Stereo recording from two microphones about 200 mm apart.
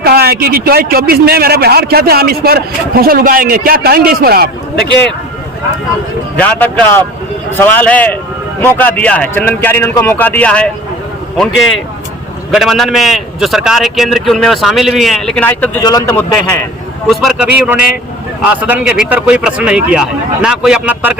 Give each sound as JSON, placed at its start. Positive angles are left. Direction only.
{"t": 0.0, "sound": "a man's voice", "side_deg": -50}
{"t": 6.3, "sound": "speech", "side_deg": 5}
{"t": 12.5, "sound": "a man's voice", "side_deg": 0}
{"t": 15.8, "sound": "a man's voice", "side_deg": 20}
{"t": 17.1, "sound": "a man's voice", "side_deg": 0}